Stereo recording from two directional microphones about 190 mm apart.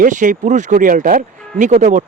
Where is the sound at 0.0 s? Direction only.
40° right (ahead or behind).